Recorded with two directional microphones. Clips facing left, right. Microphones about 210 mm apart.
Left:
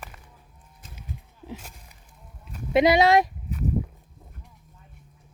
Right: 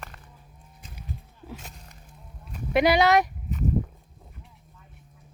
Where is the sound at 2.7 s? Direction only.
25° left (ahead or behind).